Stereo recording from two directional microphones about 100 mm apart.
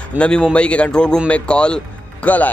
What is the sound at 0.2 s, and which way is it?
Speech, 10° left (ahead or behind).